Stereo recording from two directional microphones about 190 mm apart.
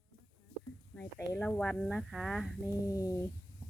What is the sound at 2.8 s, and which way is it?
Speech, 15° left (ahead or behind).